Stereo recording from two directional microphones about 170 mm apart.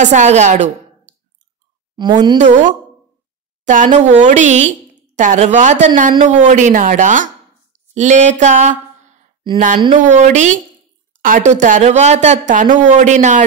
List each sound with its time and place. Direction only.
0.0 s speech: 45° right (ahead or behind)
2.0 s a woman's voice: 25° right (ahead or behind)
2.3 s speech: 45° right (ahead or behind)
7.9 s a sound: 45° right (ahead or behind)
9.9 s speech: 45° right (ahead or behind)